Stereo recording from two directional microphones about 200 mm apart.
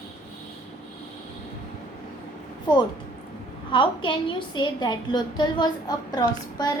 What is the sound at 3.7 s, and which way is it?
A woman's voice, 25° left (ahead or behind).